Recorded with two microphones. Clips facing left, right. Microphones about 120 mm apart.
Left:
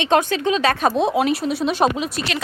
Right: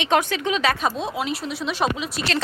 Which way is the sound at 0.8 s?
55° left (ahead or behind).